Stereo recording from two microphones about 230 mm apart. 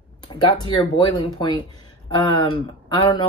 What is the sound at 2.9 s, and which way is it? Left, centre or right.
Speech, centre.